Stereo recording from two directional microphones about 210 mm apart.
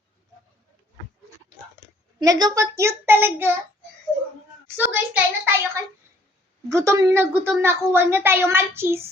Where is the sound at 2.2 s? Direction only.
20° right (ahead or behind).